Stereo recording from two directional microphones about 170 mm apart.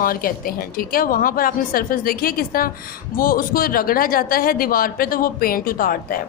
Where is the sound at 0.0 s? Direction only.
55° left (ahead or behind).